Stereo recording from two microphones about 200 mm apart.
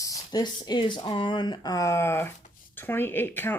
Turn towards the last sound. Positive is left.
turn(degrees=10)  # may be behind; listen again after turning